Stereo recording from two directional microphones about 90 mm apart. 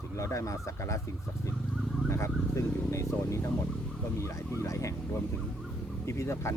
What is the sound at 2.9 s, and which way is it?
Speech, 35° left (ahead or behind).